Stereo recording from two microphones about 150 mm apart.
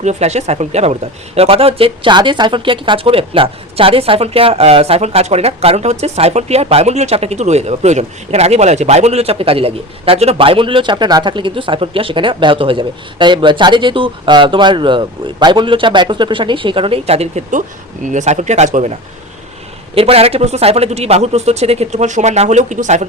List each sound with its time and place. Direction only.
0.0 s speech: 50° right (ahead or behind)
20.0 s speech: 40° right (ahead or behind)